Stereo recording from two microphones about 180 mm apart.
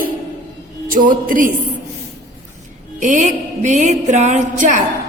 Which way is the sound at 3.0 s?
40° right (ahead or behind).